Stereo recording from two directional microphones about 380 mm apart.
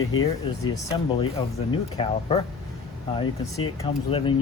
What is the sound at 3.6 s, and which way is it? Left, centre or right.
Speech, centre.